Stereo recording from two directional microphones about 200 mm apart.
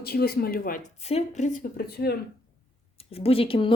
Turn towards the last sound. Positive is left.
turn(degrees=25)  # may be behind; listen again after turning